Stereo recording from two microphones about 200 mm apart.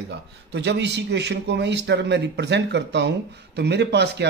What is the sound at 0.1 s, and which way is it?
Speech, 60° right (ahead or behind).